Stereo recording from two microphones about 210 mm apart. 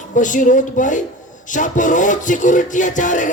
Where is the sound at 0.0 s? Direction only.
35° left (ahead or behind).